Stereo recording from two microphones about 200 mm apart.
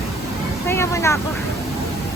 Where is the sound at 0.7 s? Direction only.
15° left (ahead or behind).